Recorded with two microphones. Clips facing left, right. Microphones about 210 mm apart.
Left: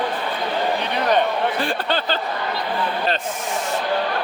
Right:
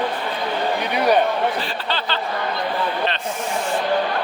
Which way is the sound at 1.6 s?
50° left (ahead or behind).